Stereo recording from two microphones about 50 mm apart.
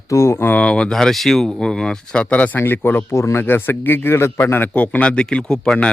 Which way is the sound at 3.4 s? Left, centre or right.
Left.